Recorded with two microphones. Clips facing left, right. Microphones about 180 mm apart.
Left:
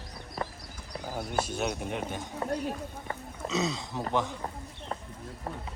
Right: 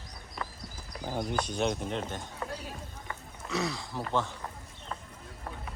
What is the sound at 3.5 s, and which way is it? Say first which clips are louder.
Speech: left 2 dB; 20° left (ahead or behind).